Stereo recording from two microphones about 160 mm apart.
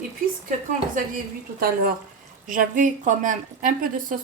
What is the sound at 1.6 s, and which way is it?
A woman's voice, 65° right (ahead or behind).